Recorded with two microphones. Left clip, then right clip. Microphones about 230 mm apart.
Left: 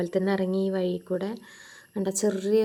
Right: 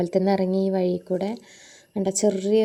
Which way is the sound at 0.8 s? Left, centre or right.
Centre.